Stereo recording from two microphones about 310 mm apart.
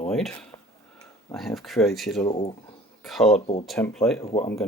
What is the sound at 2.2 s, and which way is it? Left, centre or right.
Speech, centre.